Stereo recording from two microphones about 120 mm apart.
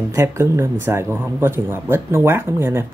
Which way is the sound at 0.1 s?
25° right (ahead or behind).